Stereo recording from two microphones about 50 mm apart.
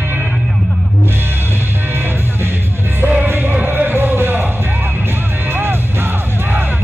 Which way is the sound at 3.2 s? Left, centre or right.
Right.